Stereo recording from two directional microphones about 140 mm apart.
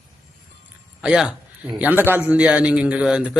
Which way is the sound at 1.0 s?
5° right (ahead or behind).